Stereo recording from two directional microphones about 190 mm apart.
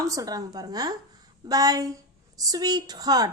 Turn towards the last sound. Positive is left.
turn(degrees=-20)  # may be behind; listen again after turning